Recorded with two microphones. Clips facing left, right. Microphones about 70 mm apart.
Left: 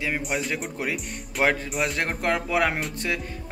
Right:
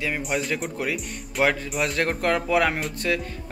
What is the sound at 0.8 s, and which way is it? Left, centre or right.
Speech, left.